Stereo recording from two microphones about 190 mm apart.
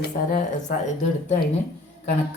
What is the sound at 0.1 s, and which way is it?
Speech, 40° left (ahead or behind).